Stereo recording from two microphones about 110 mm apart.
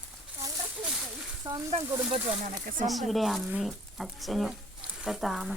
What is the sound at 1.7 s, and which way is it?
Speech, 60° right (ahead or behind).